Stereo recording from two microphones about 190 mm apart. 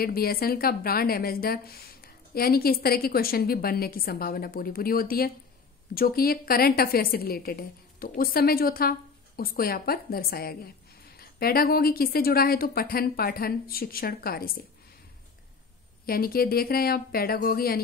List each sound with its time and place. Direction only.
0.0 s a woman's voice: 50° left (ahead or behind)
16.1 s a woman's voice: 50° left (ahead or behind)